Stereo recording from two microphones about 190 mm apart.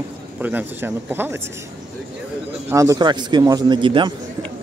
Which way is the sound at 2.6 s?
15° right (ahead or behind).